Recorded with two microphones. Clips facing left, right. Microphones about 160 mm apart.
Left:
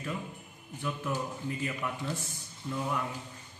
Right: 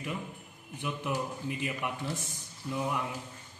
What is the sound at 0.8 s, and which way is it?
A man's voice, 15° right (ahead or behind).